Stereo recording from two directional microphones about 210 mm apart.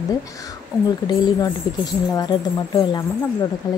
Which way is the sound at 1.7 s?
20° left (ahead or behind).